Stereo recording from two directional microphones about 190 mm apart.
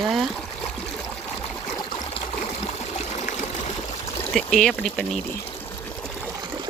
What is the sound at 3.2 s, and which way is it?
Trickle, 35° left (ahead or behind).